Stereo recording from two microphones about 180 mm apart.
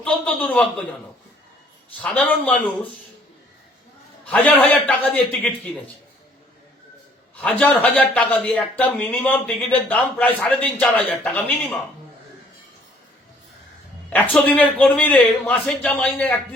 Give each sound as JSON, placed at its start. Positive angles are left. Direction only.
{"t": 0.0, "sound": "a man's voice", "side_deg": 10}
{"t": 2.0, "sound": "a man's voice", "side_deg": 10}
{"t": 4.3, "sound": "a man's voice", "side_deg": 5}
{"t": 7.4, "sound": "a man's voice", "side_deg": 10}
{"t": 14.1, "sound": "a man's voice", "side_deg": 10}